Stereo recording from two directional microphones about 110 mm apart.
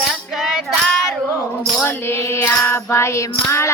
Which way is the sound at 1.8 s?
20° left (ahead or behind).